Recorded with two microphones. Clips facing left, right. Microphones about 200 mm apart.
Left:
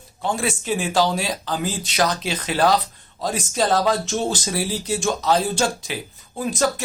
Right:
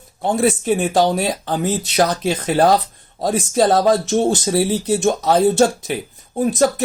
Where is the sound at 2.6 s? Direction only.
45° right (ahead or behind).